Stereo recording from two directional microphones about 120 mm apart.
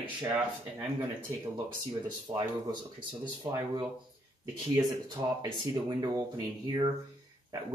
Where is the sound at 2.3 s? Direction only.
40° right (ahead or behind).